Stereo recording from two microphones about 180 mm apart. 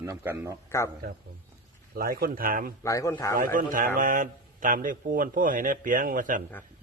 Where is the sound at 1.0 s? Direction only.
60° right (ahead or behind).